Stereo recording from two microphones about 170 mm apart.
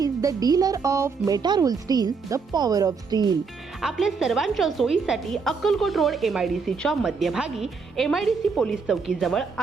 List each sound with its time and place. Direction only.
0.0 s speech: 20° right (ahead or behind)
3.8 s a woman's voice: centre (ahead or behind)